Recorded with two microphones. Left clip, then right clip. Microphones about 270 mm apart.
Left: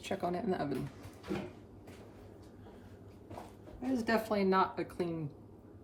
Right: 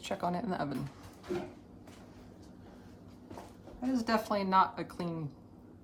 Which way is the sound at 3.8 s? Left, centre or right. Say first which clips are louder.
Right 1 dB; centre.